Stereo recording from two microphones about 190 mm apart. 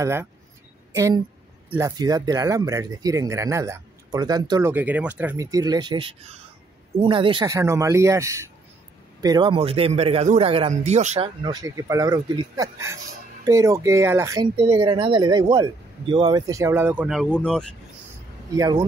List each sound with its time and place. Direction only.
0.0 s a man's voice: 15° right (ahead or behind)
7.5 s a man's voice: 15° right (ahead or behind); by 17.7 s 5° left (ahead or behind)
18.6 s a man's voice: 20° right (ahead or behind)